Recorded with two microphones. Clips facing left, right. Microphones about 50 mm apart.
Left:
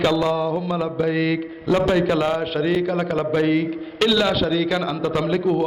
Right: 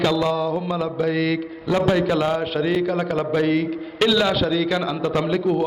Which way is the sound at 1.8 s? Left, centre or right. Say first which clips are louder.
Right 2 dB; centre.